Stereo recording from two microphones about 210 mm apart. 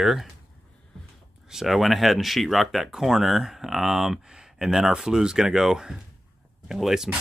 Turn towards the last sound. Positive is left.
turn(degrees=0)  # may be behind; listen again after turning